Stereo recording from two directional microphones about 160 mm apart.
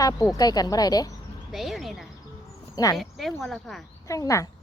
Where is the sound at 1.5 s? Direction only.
Centre (ahead or behind).